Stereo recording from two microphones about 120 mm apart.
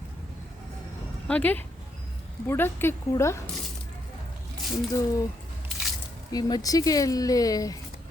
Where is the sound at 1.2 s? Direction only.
10° left (ahead or behind).